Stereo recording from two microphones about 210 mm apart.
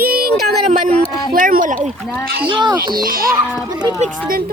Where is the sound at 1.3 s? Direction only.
40° right (ahead or behind).